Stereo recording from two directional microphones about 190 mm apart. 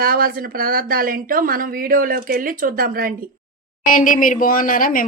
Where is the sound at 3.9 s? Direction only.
45° left (ahead or behind).